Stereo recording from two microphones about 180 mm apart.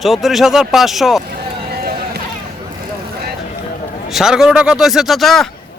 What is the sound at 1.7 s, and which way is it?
Vehicle, 60° right (ahead or behind).